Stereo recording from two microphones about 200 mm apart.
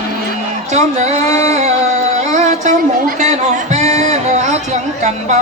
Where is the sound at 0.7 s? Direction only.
35° right (ahead or behind).